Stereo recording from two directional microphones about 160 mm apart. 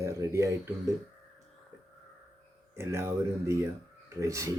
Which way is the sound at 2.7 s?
15° right (ahead or behind).